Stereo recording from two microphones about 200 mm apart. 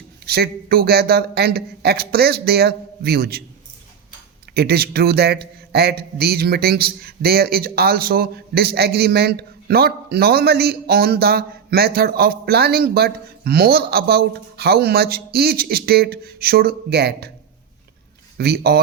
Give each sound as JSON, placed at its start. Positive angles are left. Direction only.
{"t": 0.3, "sound": "a man's voice", "side_deg": -50}
{"t": 4.5, "sound": "a man's voice", "side_deg": -50}
{"t": 18.3, "sound": "a man's voice", "side_deg": -50}